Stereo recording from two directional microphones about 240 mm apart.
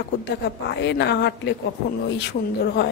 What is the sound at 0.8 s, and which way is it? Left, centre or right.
Speech, left.